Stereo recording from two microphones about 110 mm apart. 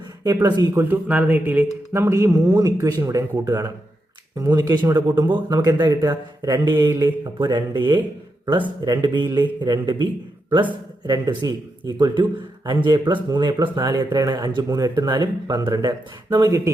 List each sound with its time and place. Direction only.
0.6 s a man's voice: 20° right (ahead or behind)